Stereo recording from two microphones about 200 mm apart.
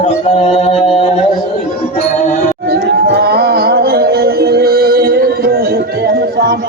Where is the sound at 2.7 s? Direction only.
55° right (ahead or behind).